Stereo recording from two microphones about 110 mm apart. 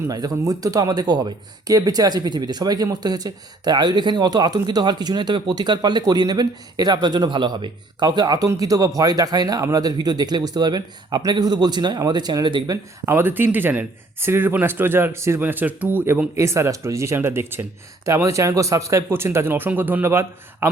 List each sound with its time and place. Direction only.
0.1 s speech: 35° right (ahead or behind)
12.7 s speech: 25° right (ahead or behind)